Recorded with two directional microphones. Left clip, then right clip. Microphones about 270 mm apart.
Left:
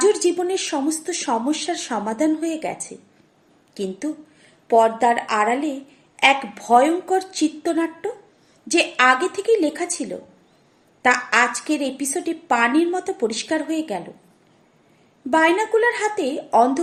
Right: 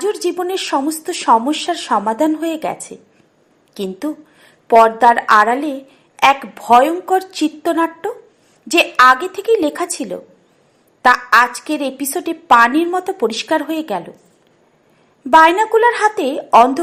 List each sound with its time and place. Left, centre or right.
0.0 s a woman's voice: centre
3.8 s a woman's voice: centre
15.3 s a woman's voice: centre